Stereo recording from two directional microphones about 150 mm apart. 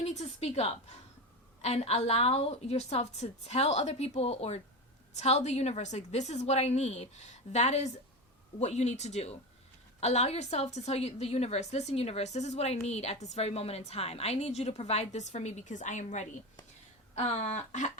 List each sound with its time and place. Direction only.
0.0 s a woman's voice: 50° left (ahead or behind)